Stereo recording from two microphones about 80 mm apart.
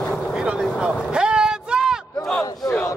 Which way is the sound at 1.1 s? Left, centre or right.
Centre.